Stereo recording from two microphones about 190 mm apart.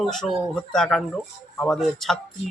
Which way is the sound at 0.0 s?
Centre (ahead or behind).